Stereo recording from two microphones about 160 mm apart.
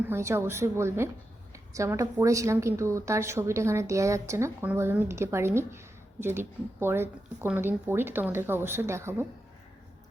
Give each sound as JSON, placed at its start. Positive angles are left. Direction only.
{"t": 0.1, "sound": "a woman's voice", "side_deg": -15}